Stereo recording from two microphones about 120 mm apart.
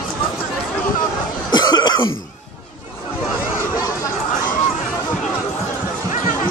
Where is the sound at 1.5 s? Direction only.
35° left (ahead or behind).